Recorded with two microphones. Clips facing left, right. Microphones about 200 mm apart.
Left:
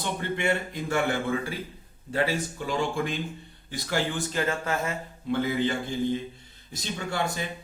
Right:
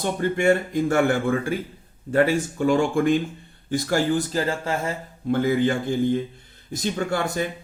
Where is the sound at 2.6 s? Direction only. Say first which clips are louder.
Right 10 dB; 50° right (ahead or behind); by 5.0 s 30° right (ahead or behind).